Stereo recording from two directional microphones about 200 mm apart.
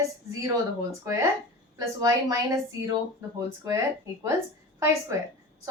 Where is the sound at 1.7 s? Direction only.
15° right (ahead or behind).